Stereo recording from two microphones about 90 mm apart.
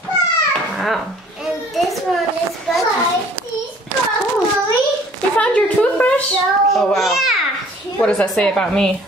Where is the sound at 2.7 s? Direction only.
5° left (ahead or behind).